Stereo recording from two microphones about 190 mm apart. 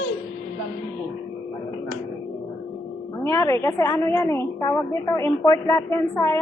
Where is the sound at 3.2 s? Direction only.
15° left (ahead or behind).